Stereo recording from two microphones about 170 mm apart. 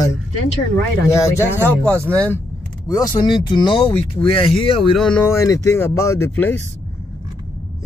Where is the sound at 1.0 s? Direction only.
15° left (ahead or behind).